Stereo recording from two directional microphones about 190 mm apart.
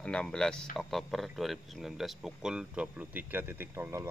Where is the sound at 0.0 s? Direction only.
5° left (ahead or behind).